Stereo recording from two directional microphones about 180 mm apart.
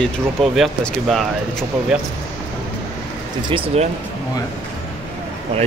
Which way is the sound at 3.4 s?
30° right (ahead or behind).